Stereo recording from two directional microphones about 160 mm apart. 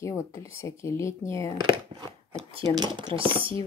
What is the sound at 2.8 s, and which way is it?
Speech, 30° right (ahead or behind).